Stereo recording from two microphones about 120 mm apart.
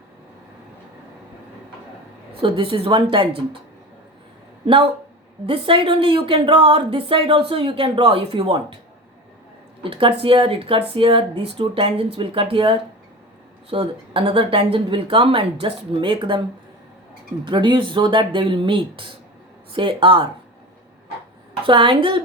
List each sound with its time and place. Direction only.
2.3 s a woman's voice: 50° right (ahead or behind)
4.6 s a woman's voice: 50° right (ahead or behind)
9.9 s a woman's voice: 50° right (ahead or behind)
17.4 s a woman's voice: 40° right (ahead or behind)
21.7 s a woman's voice: 45° right (ahead or behind)